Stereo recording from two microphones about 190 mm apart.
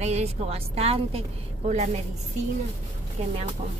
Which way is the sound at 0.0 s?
35° right (ahead or behind).